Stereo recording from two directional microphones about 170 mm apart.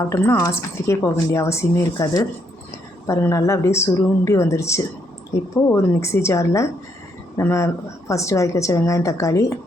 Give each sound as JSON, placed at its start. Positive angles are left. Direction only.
{"t": 0.0, "sound": "speech", "side_deg": 15}